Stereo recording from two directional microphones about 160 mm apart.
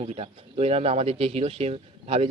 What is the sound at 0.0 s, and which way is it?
Speech, 40° right (ahead or behind).